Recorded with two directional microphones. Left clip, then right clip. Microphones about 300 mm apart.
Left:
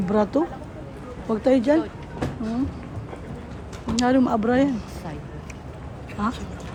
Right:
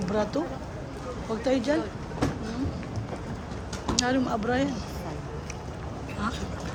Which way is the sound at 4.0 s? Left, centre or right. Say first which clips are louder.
Left 7 dB; left.